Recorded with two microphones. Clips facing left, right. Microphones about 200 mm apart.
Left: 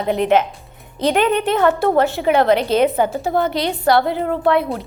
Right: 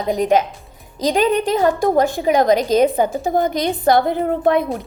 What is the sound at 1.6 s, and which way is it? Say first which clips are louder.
A woman's voice: left 1 dB; 15° right (ahead or behind).